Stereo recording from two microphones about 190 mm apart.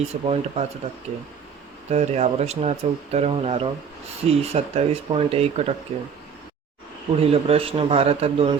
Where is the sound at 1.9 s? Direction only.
35° right (ahead or behind).